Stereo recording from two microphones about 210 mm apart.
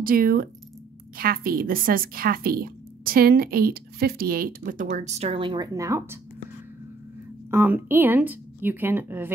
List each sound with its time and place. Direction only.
0.0 s a woman's voice: 45° right (ahead or behind); by 6.1 s 15° right (ahead or behind)
7.5 s a woman's voice: 10° right (ahead or behind)